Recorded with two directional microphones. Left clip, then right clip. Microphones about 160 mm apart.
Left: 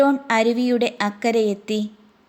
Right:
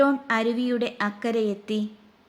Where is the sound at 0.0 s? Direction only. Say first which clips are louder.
Left 4 dB; 25° left (ahead or behind).